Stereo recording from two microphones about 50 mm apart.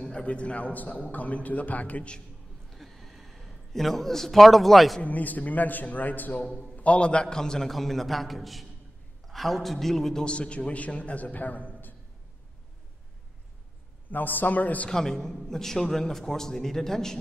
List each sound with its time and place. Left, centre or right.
0.0 s a man's voice: centre
2.7 s a sound: centre
5.0 s a man's voice: left
6.4 s a man's voice: centre
6.7 s a man's voice: left; by 10.2 s centre
10.2 s a man's voice: left
14.1 s a man's voice: left
14.9 s a man's voice: centre